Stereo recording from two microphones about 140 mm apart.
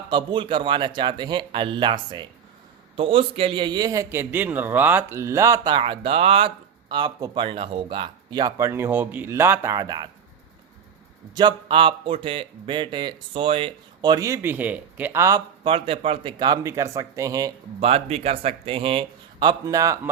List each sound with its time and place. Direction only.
0.1 s a man's voice: 35° right (ahead or behind)
5.7 s speech: 40° right (ahead or behind)
11.3 s speech: 35° right (ahead or behind)
15.6 s a man's voice: 40° right (ahead or behind); by 17.5 s 25° right (ahead or behind)
17.7 s speech: 45° right (ahead or behind); by 20.0 s 25° right (ahead or behind)